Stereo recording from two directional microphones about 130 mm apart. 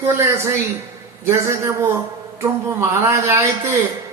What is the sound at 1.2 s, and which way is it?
Speech, 20° right (ahead or behind).